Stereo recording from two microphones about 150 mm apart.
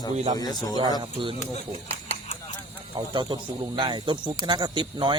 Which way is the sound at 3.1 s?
30° right (ahead or behind).